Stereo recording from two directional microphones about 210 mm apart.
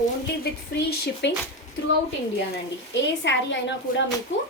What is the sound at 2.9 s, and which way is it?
Speech, 60° left (ahead or behind).